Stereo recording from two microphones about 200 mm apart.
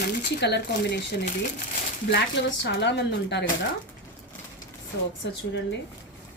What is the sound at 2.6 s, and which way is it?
Speech, 60° left (ahead or behind).